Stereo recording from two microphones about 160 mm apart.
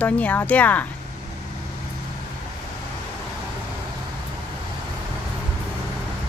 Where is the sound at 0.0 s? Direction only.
10° left (ahead or behind).